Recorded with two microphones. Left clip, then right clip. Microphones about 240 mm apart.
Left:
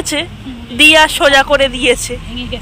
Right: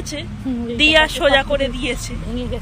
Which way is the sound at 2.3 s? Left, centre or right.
Right.